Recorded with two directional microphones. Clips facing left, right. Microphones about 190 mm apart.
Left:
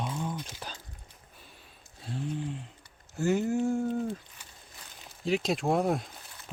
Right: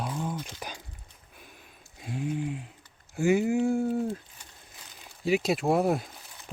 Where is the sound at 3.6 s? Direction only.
10° right (ahead or behind).